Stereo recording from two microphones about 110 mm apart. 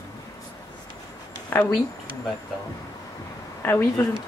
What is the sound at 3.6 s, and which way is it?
Speech, 20° left (ahead or behind).